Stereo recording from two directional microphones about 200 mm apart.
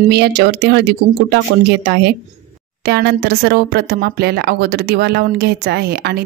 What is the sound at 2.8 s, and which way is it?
Speech, 55° right (ahead or behind).